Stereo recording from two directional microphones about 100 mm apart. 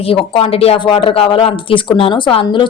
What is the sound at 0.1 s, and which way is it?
Speech, 70° left (ahead or behind).